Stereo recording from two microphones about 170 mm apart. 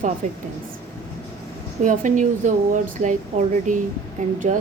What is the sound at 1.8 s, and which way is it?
Speech, 50° right (ahead or behind).